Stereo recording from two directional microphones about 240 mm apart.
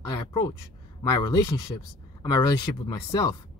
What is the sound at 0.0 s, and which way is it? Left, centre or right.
A woman's voice, centre.